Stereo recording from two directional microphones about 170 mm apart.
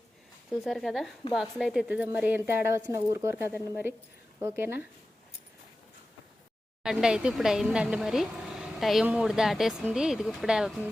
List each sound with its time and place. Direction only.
0.5 s a woman's voice: centre (ahead or behind)
6.8 s speech: 5° right (ahead or behind)